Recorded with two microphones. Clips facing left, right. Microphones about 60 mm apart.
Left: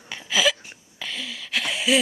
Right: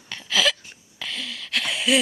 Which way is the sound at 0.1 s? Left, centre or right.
Centre.